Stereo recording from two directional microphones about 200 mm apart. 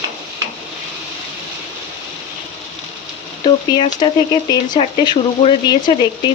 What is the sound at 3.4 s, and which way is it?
Speech, 25° left (ahead or behind).